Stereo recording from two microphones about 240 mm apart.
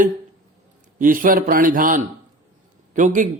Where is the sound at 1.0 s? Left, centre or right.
Right.